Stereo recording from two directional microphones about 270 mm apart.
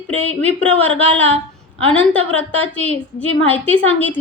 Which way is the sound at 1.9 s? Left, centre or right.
Centre.